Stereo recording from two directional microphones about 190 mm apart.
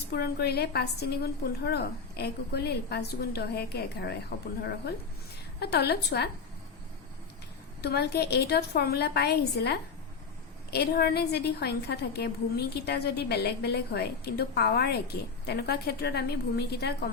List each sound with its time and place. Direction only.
0.1 s a woman's voice: 55° left (ahead or behind)
5.5 s a woman's voice: 60° left (ahead or behind)
7.8 s a woman's voice: 60° left (ahead or behind)